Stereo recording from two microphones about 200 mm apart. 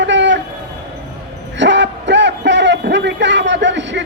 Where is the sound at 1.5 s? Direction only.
60° right (ahead or behind).